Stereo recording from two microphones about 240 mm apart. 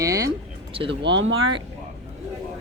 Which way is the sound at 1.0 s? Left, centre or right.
Right.